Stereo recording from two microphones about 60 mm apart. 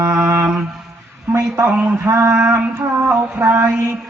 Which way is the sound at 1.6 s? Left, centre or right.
Right.